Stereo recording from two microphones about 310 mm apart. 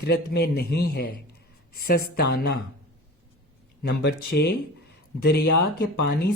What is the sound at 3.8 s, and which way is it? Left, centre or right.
Speech, left.